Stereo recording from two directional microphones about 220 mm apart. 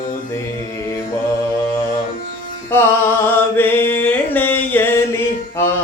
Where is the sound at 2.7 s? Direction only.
10° left (ahead or behind).